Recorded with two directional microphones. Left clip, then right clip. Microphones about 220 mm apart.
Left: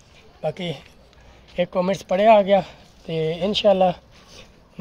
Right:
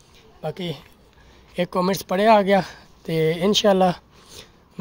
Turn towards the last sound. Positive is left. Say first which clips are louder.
# right 1 dB
turn(degrees=-20)  # may be behind; listen again after turning